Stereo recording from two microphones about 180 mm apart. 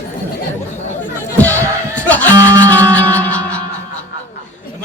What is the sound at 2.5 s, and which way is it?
Speech, 10° left (ahead or behind).